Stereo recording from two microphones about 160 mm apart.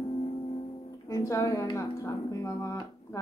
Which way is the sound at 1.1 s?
20° left (ahead or behind).